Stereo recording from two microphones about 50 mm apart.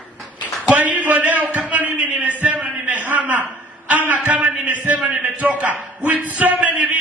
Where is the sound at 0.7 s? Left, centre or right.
Right.